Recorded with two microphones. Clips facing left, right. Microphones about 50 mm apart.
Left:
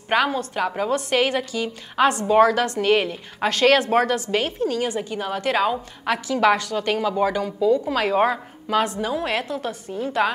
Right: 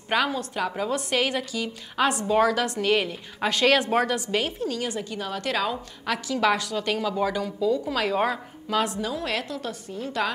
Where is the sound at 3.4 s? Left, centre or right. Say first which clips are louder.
Left 4 dB; centre.